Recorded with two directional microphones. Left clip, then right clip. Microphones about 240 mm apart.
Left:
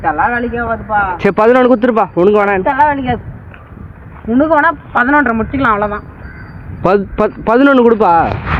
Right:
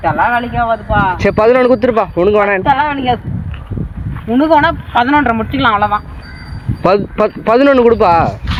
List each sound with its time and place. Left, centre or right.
0.0 s speech: right
1.2 s speech: centre
4.3 s speech: right
6.8 s speech: centre